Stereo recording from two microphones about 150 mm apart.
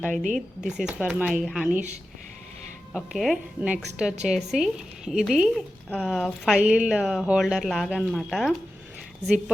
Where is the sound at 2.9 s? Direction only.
Centre (ahead or behind).